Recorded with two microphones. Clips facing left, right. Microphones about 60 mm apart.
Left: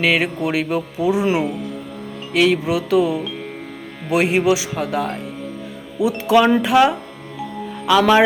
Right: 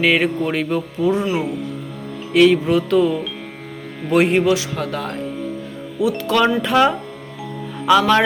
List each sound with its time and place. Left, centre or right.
0.0 s music: centre
2.3 s music: centre
4.1 s speech: centre
4.4 s music: centre
6.0 s music: left
6.6 s speech: centre
7.9 s music: centre